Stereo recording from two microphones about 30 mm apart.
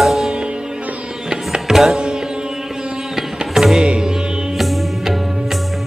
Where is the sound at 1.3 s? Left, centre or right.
Right.